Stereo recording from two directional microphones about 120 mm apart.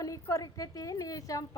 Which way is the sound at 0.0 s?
30° left (ahead or behind).